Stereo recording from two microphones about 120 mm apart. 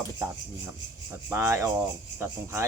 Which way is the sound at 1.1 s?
20° right (ahead or behind).